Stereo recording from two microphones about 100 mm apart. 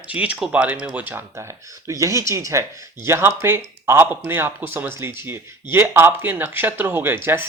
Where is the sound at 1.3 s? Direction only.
30° right (ahead or behind).